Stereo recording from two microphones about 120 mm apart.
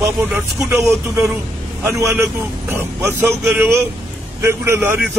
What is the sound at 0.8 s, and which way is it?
Speech, centre (ahead or behind).